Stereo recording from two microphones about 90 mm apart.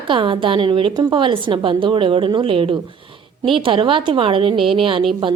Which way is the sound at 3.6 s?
70° right (ahead or behind).